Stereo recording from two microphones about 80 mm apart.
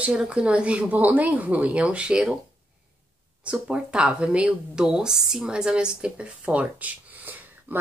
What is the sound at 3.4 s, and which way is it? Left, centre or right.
Speech, centre.